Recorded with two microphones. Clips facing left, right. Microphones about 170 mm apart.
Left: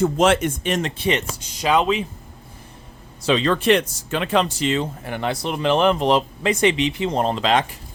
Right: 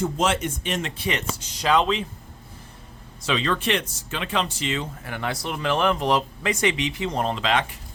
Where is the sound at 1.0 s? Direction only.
25° left (ahead or behind).